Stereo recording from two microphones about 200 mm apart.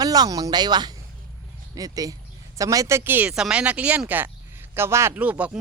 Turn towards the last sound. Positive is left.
turn(degrees=-5)  # may be behind; listen again after turning